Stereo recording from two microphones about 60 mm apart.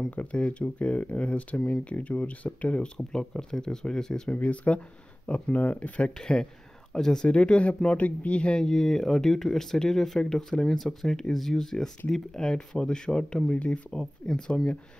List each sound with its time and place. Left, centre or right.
0.1 s speech: left
3.0 s speech: centre
4.3 s speech: left
6.1 s speech: centre